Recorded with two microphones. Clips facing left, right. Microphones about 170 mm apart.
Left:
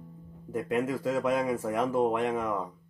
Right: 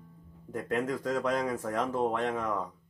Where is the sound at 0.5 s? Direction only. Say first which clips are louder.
Left 2 dB; 5° left (ahead or behind).